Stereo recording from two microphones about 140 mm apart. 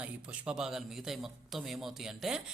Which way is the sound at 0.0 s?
5° right (ahead or behind).